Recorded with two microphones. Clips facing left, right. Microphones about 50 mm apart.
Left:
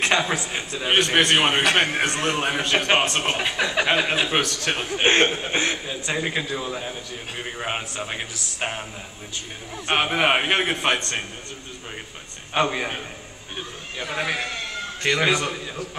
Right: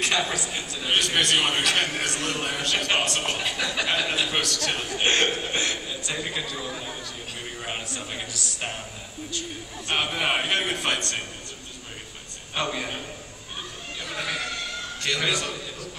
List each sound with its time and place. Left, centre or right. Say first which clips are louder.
0.0 s a man's voice: left 4 dB; left
9.8 s a man's voice: left 5 dB; left
12.5 s a man's voice: left 6 dB; left